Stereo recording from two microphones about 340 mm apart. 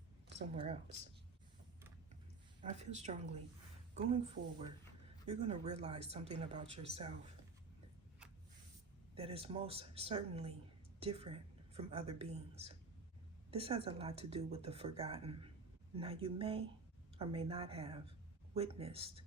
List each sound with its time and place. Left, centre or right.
0.5 s speech: centre
2.6 s speech: centre
4.4 s speech: right
5.2 s speech: centre
9.1 s a woman's voice: centre